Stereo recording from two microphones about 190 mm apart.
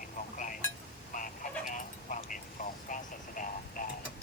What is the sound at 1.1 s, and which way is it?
Telephone, 45° left (ahead or behind).